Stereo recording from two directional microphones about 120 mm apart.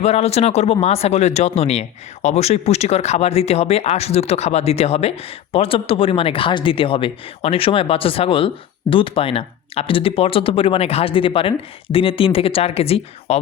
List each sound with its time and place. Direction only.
0.0 s speech: 60° left (ahead or behind)